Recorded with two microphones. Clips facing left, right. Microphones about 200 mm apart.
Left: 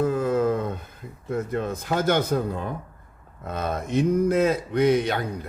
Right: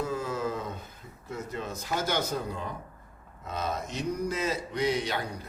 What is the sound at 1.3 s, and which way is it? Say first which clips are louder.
Speech: left 9 dB; 55° left (ahead or behind).